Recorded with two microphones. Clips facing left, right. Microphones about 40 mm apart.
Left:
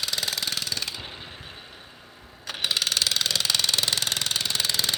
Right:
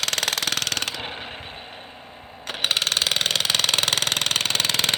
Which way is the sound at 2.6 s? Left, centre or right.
Right.